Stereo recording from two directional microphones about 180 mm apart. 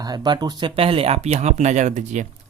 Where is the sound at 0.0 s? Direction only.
20° right (ahead or behind).